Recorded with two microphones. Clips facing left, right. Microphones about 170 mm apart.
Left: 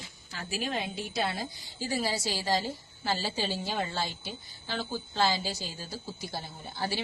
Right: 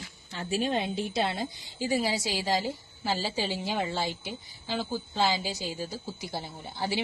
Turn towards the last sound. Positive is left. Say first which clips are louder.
# right 2 dB
turn(degrees=-15)  # may be behind; listen again after turning